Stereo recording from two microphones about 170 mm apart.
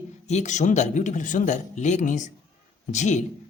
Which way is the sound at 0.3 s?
45° left (ahead or behind).